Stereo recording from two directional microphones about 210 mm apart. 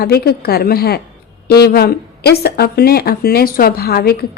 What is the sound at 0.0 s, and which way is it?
A woman's voice, 45° left (ahead or behind).